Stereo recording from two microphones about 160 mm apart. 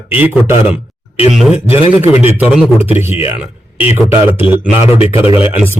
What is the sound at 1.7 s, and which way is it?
Speech, 35° left (ahead or behind).